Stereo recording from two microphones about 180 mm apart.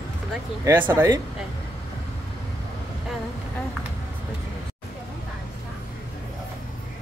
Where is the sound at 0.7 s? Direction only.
10° right (ahead or behind).